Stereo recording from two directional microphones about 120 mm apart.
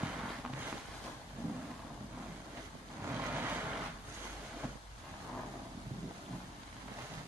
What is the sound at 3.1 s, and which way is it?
Vehicle, 15° right (ahead or behind).